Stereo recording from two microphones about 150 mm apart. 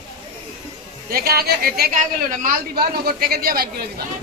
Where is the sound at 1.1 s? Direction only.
90° right.